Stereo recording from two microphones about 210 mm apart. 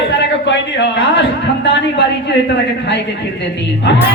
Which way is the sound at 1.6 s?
55° left (ahead or behind).